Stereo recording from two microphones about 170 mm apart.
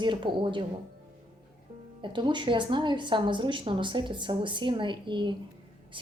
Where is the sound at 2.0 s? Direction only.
25° right (ahead or behind).